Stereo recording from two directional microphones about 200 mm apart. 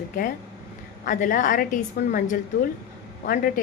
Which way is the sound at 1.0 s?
40° left (ahead or behind).